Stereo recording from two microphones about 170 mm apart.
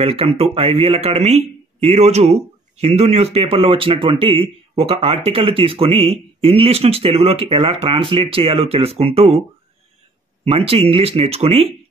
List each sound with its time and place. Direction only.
0.0 s speech: 35° right (ahead or behind)
10.4 s speech: 35° right (ahead or behind)